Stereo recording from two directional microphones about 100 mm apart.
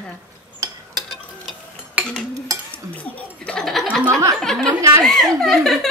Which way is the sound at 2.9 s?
15° left (ahead or behind).